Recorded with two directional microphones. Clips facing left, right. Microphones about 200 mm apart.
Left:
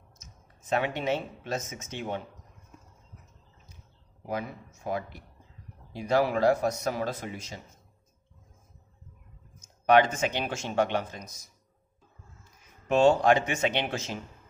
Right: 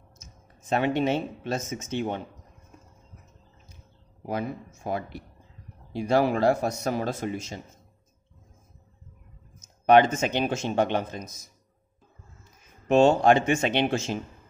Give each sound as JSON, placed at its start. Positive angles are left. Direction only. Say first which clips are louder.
{"t": 0.7, "sound": "speech", "louder": "right 4 dB", "side_deg": -30}
{"t": 4.3, "sound": "speech", "louder": "right 3 dB", "side_deg": -30}
{"t": 9.6, "sound": "a sound", "louder": "right 3 dB", "side_deg": -25}
{"t": 10.3, "sound": "speech", "louder": "right 4 dB", "side_deg": -20}
{"t": 12.8, "sound": "speech", "louder": "right 3 dB", "side_deg": -25}